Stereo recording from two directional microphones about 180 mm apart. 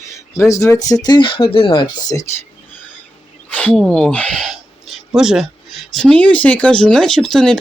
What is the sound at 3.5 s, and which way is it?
Speech, 10° left (ahead or behind).